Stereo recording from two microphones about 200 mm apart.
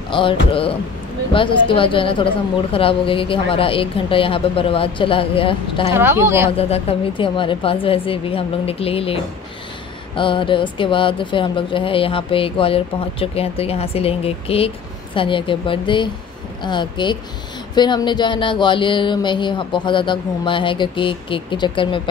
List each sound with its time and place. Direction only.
0.1 s speech: 25° left (ahead or behind)
5.9 s speech: 15° right (ahead or behind)
6.5 s speech: 30° left (ahead or behind)